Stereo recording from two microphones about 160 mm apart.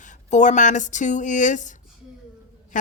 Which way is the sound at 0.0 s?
50° left (ahead or behind).